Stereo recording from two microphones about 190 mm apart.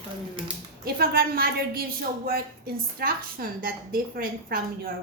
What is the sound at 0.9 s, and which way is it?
Speech, 55° right (ahead or behind).